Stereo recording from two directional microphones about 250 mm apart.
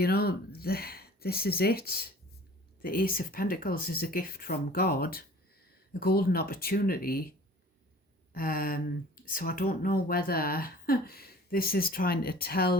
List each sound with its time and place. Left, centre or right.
0.0 s speech: left